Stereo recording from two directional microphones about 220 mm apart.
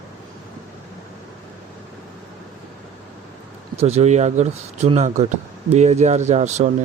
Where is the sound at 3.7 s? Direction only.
30° right (ahead or behind).